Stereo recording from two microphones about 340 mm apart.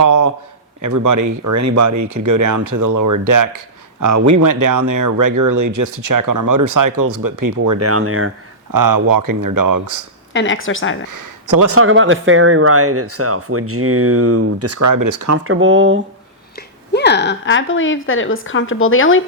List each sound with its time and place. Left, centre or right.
0.0 s a man's voice: right
4.0 s speech: right
7.5 s speech: right
7.9 s speech: right
8.7 s speech: right
10.3 s speech: left
11.1 s speech: right
11.7 s speech: right
15.4 s speech: right
16.9 s speech: left